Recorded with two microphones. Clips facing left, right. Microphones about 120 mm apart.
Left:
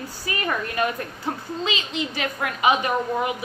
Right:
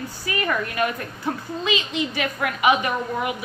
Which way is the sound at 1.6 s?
35° left (ahead or behind).